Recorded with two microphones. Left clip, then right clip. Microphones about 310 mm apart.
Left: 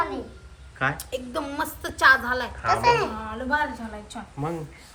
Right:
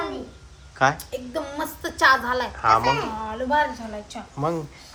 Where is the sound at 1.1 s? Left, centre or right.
Centre.